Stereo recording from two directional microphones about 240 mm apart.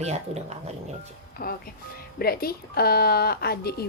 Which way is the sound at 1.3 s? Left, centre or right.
Left.